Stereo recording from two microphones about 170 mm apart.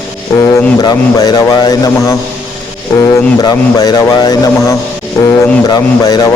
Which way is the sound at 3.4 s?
25° left (ahead or behind).